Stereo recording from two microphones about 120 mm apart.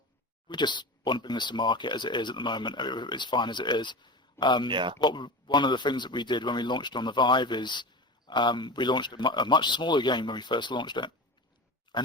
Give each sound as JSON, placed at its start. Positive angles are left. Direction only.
{"t": 0.4, "sound": "speech", "side_deg": 40}
{"t": 4.7, "sound": "speech", "side_deg": -40}
{"t": 4.9, "sound": "speech", "side_deg": 40}
{"t": 11.9, "sound": "pig", "side_deg": 40}